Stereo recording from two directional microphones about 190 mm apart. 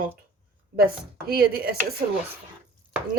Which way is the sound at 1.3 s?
50° right (ahead or behind).